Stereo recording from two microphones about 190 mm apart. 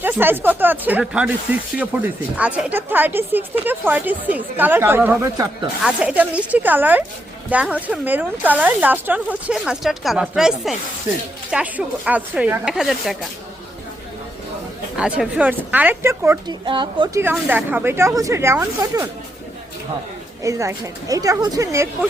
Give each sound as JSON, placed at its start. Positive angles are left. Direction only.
{"t": 0.0, "sound": "a woman's voice", "side_deg": -10}
{"t": 14.9, "sound": "a woman's voice", "side_deg": -5}
{"t": 16.6, "sound": "speech", "side_deg": -25}
{"t": 17.2, "sound": "a woman's voice", "side_deg": -10}
{"t": 20.4, "sound": "a woman's voice", "side_deg": -15}